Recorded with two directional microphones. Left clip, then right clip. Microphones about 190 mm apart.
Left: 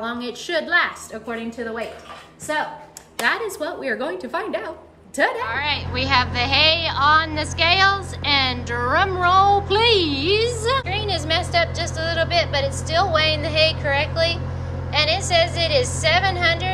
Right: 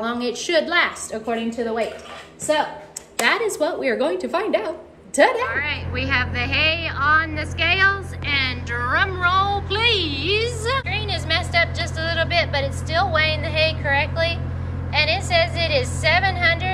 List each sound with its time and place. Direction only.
0.0 s a woman's voice: 20° left (ahead or behind)
3.2 s a woman's voice: 20° left (ahead or behind)